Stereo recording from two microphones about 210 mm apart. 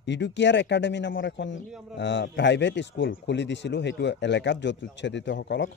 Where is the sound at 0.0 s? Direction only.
55° left (ahead or behind).